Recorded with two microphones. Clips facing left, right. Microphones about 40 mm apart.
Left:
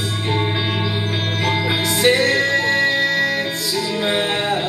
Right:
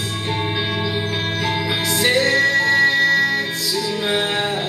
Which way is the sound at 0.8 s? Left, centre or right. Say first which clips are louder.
Even; centre.